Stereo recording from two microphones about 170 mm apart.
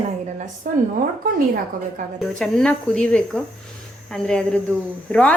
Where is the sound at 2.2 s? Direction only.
5° left (ahead or behind).